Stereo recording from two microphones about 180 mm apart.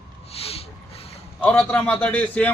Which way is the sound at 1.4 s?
5° left (ahead or behind).